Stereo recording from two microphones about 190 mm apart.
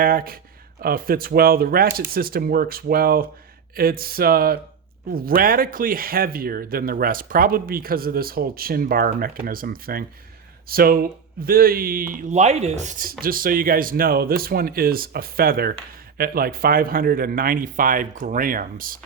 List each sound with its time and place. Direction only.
0.0 s speech: 50° right (ahead or behind)